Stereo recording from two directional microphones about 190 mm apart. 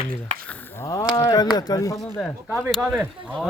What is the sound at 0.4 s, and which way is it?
Speech, 10° left (ahead or behind).